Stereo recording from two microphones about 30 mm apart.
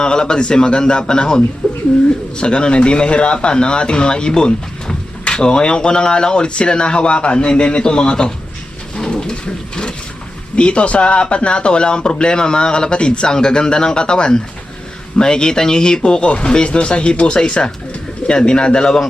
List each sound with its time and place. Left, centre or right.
0.0 s a man's voice: left
1.6 s bird: left
2.4 s speech: left
10.5 s a man's voice: left
16.2 s a man's voice: left